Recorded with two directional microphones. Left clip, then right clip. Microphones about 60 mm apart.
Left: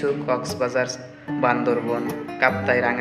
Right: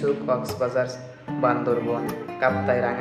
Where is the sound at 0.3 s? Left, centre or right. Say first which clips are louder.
Left 1 dB; right.